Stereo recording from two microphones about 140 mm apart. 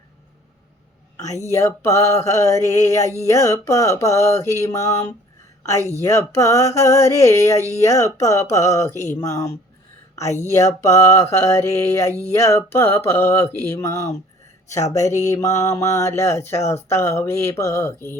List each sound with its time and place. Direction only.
1.5 s mantra: 20° left (ahead or behind)
10.5 s mantra: 20° left (ahead or behind)
15.2 s mantra: 20° left (ahead or behind)